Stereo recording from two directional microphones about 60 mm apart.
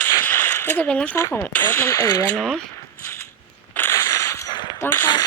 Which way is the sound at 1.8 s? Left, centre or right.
Left.